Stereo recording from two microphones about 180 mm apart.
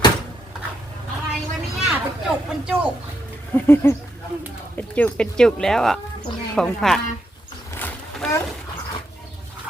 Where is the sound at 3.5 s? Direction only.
15° left (ahead or behind).